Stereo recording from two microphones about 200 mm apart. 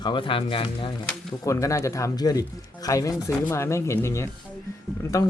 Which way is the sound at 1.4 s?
15° left (ahead or behind).